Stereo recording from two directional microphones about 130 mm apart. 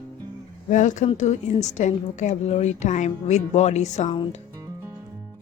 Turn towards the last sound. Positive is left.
turn(degrees=35)  # may be behind; listen again after turning